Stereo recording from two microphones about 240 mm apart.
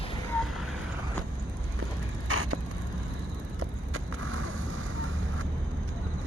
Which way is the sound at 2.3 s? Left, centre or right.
Right.